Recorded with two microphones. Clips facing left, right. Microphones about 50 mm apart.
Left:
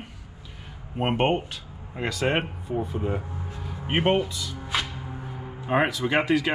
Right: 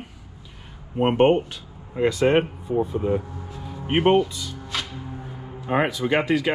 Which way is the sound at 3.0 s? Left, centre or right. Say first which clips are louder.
Right 5 dB; left.